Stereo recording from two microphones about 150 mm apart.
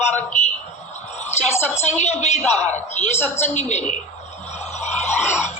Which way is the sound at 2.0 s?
50° left (ahead or behind).